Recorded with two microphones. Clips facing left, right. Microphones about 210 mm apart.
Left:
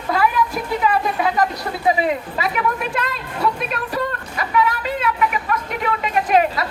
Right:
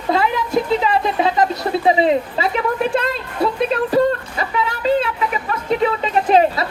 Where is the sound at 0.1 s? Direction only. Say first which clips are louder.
Right 2 dB; 25° right (ahead or behind).